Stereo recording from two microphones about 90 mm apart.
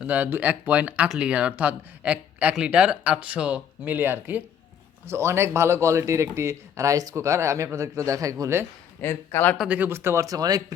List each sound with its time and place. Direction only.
0.0 s speech: 20° right (ahead or behind); by 8.6 s 35° right (ahead or behind)
9.0 s speech: 25° left (ahead or behind)
9.6 s speech: 20° right (ahead or behind)
10.2 s speech: 45° right (ahead or behind)